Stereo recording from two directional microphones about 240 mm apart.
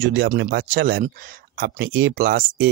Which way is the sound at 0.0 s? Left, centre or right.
Right.